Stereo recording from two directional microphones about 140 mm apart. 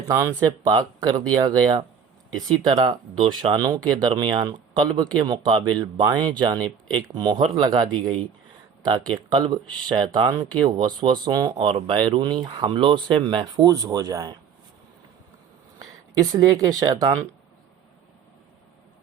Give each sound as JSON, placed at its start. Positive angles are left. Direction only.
{"t": 0.1, "sound": "speech", "side_deg": -25}
{"t": 15.8, "sound": "speech", "side_deg": -25}